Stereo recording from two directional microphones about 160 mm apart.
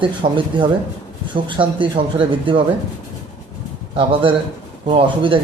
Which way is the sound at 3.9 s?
35° right (ahead or behind).